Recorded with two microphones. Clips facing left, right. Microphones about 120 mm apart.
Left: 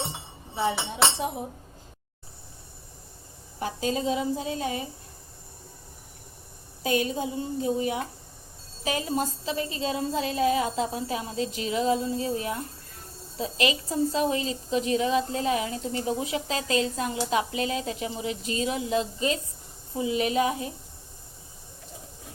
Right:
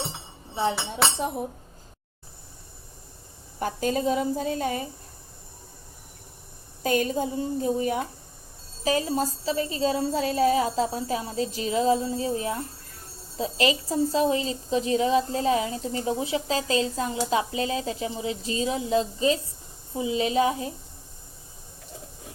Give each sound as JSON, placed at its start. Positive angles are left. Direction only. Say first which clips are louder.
{"t": 0.5, "sound": "speech", "louder": "right 1 dB", "side_deg": -30}
{"t": 3.6, "sound": "speech", "louder": "right 2 dB", "side_deg": -50}
{"t": 6.8, "sound": "a woman's voice", "louder": "right 2 dB", "side_deg": -45}